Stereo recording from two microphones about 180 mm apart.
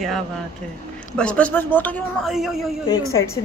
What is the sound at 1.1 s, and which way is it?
Speech, 5° left (ahead or behind).